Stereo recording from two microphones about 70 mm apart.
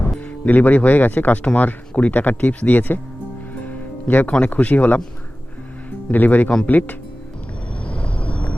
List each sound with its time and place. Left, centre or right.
0.4 s speech: left
6.1 s speech: left
7.9 s a sound: centre